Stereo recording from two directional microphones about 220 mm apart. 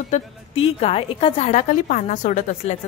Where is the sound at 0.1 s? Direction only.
25° left (ahead or behind).